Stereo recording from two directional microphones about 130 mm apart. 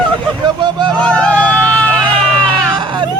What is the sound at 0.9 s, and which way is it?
Vehicle, 10° left (ahead or behind).